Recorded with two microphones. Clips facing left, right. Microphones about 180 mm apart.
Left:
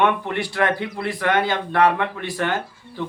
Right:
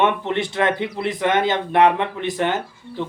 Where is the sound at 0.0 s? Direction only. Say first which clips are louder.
Right 1 dB; 20° right (ahead or behind).